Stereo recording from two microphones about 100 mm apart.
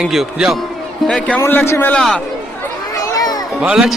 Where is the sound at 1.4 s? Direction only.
25° left (ahead or behind).